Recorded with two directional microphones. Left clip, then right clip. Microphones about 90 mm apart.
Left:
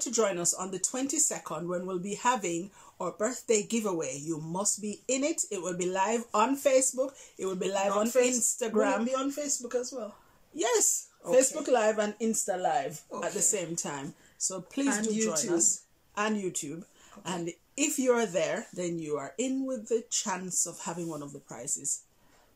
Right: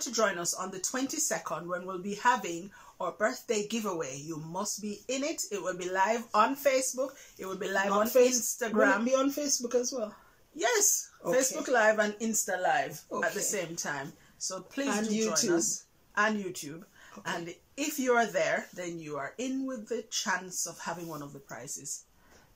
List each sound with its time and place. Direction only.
0.0 s speech: 35° left (ahead or behind)
9.0 s speech: 25° right (ahead or behind)
10.6 s speech: 30° left (ahead or behind)
13.2 s speech: 35° left (ahead or behind)